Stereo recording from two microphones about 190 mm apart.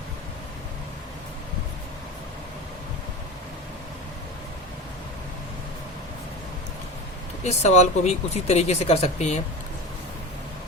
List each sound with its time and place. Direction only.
7.4 s speech: 35° left (ahead or behind)